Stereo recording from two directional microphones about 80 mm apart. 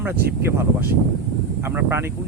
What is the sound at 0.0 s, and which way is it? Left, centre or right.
Speech, right.